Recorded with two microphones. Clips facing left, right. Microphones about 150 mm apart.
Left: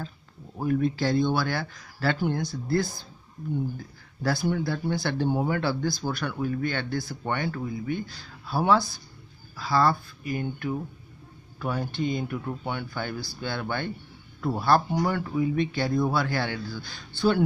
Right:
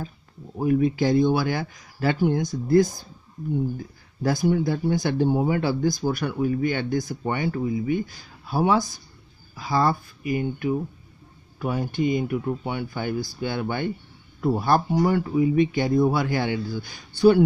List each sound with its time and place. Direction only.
0.6 s speech: 10° right (ahead or behind)